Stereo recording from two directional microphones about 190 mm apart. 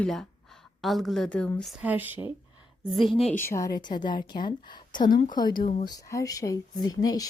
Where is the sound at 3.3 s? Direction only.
10° left (ahead or behind).